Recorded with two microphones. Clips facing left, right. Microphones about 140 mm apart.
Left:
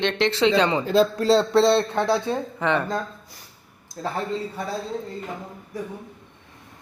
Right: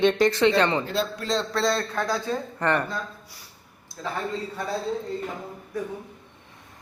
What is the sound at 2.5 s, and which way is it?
Speech, centre (ahead or behind).